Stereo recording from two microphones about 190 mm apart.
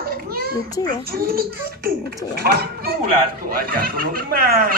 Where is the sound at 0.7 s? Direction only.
20° left (ahead or behind).